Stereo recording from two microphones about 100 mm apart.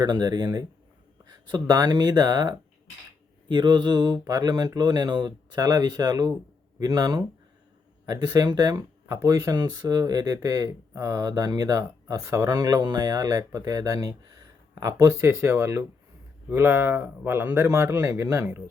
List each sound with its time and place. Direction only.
0.0 s speech: 40° right (ahead or behind)
3.5 s mantra: 50° right (ahead or behind)
4.2 s speech: 40° right (ahead or behind)